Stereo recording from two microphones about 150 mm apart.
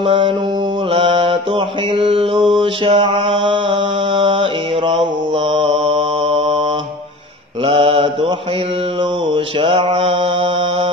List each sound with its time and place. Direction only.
0.0 s mantra: 35° right (ahead or behind)
7.6 s mantra: 35° right (ahead or behind)
9.3 s mantra: 35° right (ahead or behind)